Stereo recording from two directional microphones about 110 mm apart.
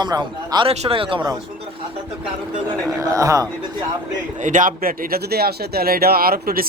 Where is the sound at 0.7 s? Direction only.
55° right (ahead or behind).